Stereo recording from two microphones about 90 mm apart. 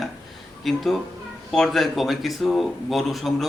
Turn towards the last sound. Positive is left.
turn(degrees=0)  # may be behind; listen again after turning